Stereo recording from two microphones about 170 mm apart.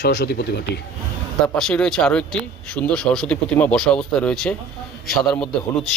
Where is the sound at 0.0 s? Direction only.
70° left (ahead or behind).